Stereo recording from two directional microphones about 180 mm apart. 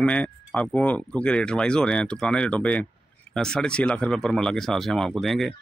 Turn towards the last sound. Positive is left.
turn(degrees=0)  # may be behind; listen again after turning